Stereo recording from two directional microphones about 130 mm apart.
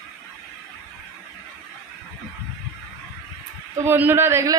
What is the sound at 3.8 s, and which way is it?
Speech, 15° right (ahead or behind).